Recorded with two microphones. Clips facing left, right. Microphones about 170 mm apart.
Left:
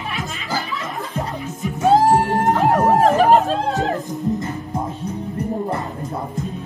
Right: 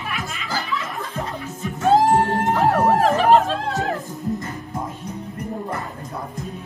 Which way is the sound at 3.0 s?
40° left (ahead or behind).